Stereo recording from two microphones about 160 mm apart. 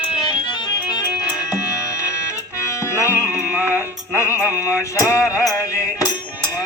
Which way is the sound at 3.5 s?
15° right (ahead or behind).